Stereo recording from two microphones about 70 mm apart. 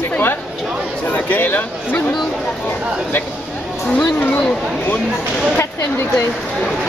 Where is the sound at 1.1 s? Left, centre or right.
Left.